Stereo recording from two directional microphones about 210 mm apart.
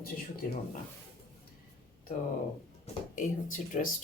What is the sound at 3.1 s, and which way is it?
Speech, 40° left (ahead or behind).